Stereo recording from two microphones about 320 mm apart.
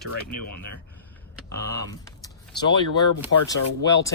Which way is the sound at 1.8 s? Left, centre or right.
Centre.